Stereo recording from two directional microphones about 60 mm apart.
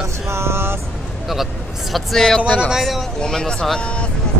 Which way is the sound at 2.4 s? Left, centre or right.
Left.